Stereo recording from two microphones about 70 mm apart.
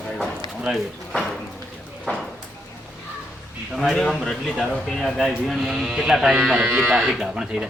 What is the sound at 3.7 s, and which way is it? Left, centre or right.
A man's voice, centre.